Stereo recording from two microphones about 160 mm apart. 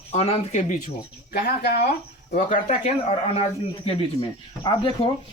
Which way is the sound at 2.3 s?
50° left (ahead or behind).